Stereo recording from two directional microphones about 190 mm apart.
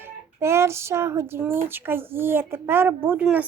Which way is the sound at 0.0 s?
15° right (ahead or behind).